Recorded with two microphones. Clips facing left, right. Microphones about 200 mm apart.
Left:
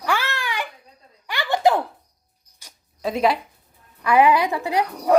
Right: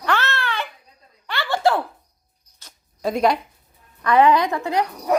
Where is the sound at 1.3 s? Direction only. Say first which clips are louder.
Left 1 dB; 15° left (ahead or behind).